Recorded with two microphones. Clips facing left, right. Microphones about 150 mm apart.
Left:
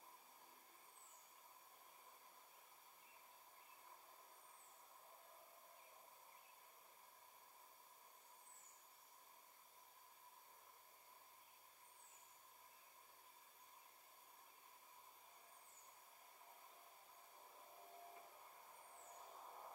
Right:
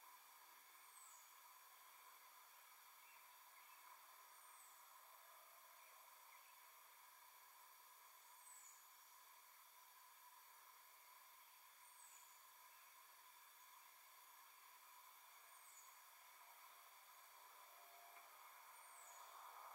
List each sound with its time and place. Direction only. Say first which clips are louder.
19.0 s vehicle: left 4 dB; 25° left (ahead or behind)